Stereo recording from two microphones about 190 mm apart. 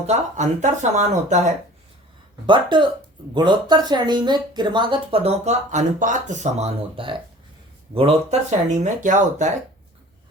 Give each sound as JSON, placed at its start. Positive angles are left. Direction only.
{"t": 0.1, "sound": "speech", "side_deg": -40}
{"t": 2.5, "sound": "speech", "side_deg": -25}